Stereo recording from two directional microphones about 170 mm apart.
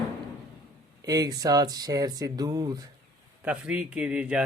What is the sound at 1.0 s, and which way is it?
Speech, 20° right (ahead or behind).